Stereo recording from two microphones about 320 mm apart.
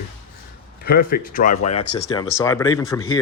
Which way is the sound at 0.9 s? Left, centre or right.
Left.